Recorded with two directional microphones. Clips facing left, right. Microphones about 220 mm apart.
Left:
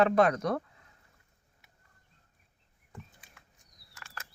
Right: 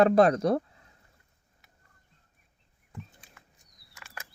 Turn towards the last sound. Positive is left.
turn(degrees=-10)  # may be behind; listen again after turning